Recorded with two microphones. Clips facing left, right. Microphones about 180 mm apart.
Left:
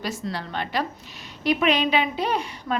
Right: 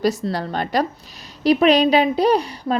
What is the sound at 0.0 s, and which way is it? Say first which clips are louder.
A woman's voice: right 9 dB; 40° right (ahead or behind).